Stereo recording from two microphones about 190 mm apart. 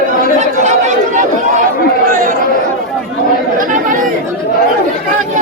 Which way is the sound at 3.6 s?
45° right (ahead or behind).